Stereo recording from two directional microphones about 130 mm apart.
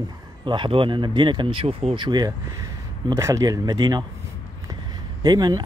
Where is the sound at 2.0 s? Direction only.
35° right (ahead or behind).